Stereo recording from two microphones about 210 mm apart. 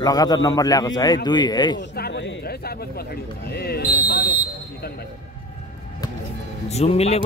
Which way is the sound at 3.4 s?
50° left (ahead or behind).